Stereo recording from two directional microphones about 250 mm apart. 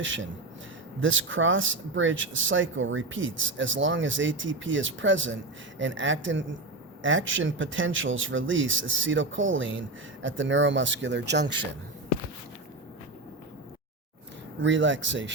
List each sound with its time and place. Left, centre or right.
0.0 s speech: right
14.6 s speech: right